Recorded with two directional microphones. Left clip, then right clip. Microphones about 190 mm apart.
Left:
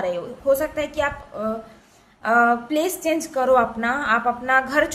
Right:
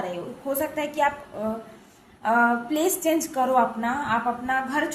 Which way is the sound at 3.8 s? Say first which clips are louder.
Left 4 dB; 35° left (ahead or behind).